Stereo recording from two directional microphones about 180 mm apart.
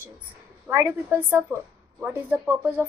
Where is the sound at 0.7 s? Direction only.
15° right (ahead or behind).